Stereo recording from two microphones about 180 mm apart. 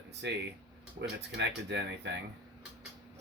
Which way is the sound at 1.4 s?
70° right (ahead or behind).